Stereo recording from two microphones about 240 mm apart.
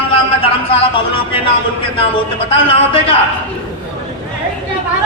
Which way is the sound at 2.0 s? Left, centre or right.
Left.